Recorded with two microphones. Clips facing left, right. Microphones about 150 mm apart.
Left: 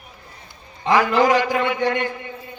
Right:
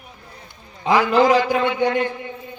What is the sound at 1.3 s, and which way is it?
Speech, 25° right (ahead or behind).